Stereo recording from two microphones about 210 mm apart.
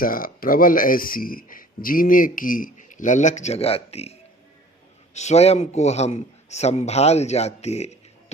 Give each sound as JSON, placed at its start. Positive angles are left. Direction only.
{"t": 0.0, "sound": "speech", "side_deg": 40}